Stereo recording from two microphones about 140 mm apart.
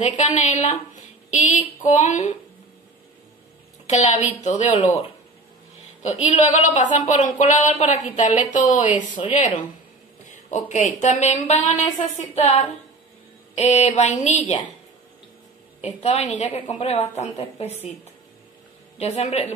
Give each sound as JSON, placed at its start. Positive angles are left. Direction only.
{"t": 0.0, "sound": "a woman's voice", "side_deg": 55}
{"t": 3.8, "sound": "speech", "side_deg": 55}
{"t": 6.2, "sound": "a woman's voice", "side_deg": 55}
{"t": 15.8, "sound": "a woman's voice", "side_deg": 50}
{"t": 18.9, "sound": "a woman's voice", "side_deg": 50}